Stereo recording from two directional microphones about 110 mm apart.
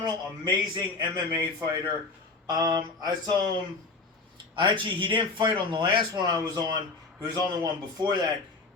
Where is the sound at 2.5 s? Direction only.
40° right (ahead or behind).